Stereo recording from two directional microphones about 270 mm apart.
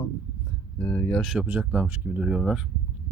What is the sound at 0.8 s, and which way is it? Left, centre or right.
Speech, centre.